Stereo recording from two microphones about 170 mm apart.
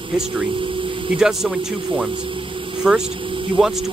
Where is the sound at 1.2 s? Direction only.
5° right (ahead or behind).